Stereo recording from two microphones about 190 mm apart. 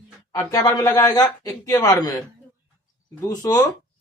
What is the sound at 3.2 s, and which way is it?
Speech, 20° left (ahead or behind).